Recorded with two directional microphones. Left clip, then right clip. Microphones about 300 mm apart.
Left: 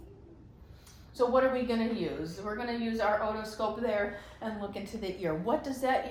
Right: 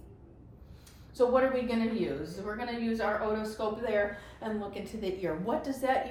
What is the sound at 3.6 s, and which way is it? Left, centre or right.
A woman's voice, centre.